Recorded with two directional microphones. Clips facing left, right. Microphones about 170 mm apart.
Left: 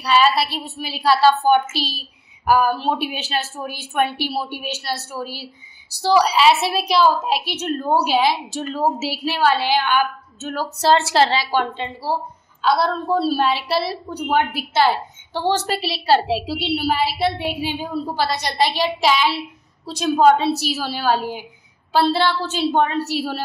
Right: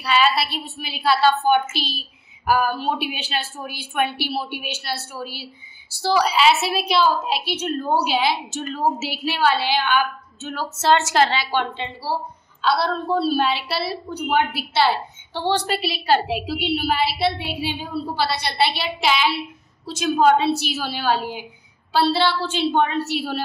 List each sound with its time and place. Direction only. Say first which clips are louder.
0.0 s a woman's voice: left 3 dB; 40° left (ahead or behind)